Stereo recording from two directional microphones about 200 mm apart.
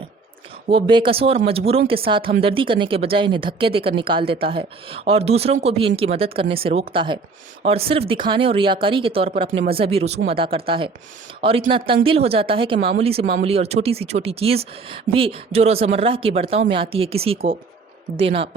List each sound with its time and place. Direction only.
0.7 s speech: 25° right (ahead or behind)